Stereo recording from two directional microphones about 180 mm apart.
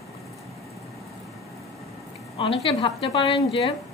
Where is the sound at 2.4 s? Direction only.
30° left (ahead or behind).